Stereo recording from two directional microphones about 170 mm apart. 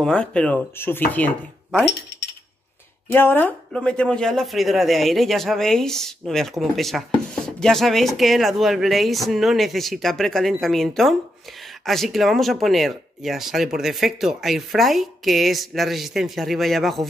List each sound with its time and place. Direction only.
0.0 s speech: 5° left (ahead or behind)
3.1 s speech: 10° left (ahead or behind)